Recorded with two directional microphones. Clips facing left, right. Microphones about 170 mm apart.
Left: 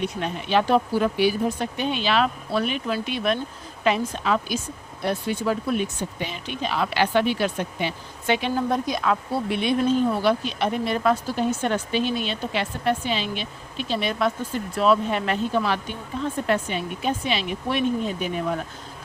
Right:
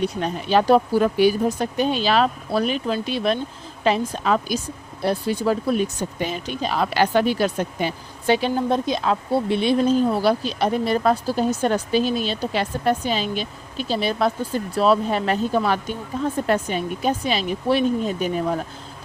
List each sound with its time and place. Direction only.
0.0 s speech: 35° right (ahead or behind)